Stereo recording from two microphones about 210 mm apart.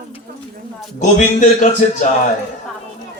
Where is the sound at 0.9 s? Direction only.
35° left (ahead or behind).